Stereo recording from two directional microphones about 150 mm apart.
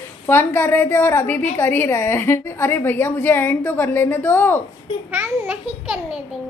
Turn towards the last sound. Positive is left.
turn(degrees=-10)  # may be behind; listen again after turning